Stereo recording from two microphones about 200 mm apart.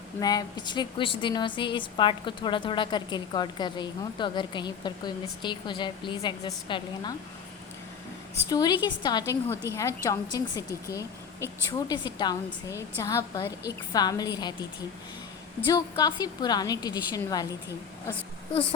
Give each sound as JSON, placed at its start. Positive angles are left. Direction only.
{"t": 0.2, "sound": "a woman's voice", "side_deg": 20}
{"t": 8.4, "sound": "a woman's voice", "side_deg": 20}
{"t": 15.7, "sound": "a woman's voice", "side_deg": 20}